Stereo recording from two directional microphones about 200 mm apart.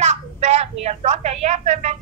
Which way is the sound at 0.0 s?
35° right (ahead or behind).